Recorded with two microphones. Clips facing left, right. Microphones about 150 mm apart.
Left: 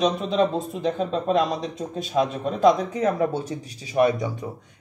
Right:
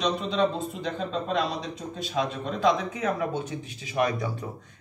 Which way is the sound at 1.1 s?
45° left (ahead or behind).